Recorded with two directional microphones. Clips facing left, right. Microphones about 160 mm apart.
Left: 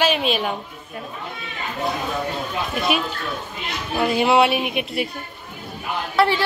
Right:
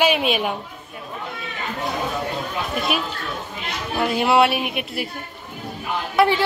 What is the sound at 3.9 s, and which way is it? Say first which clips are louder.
A child's voice: left 1 dB; centre (ahead or behind).